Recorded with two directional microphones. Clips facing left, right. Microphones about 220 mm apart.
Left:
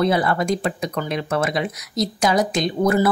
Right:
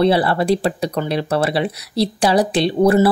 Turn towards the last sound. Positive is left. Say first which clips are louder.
# right 5 dB
turn(degrees=-30)  # may be behind; listen again after turning